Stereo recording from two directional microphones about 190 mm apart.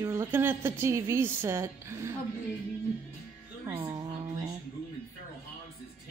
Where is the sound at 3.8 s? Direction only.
20° right (ahead or behind).